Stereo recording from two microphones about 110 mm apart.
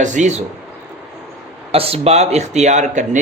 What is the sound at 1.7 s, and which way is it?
Speech, 60° right (ahead or behind).